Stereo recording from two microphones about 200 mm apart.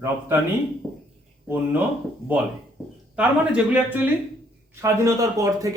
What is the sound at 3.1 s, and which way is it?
Speech, 5° right (ahead or behind).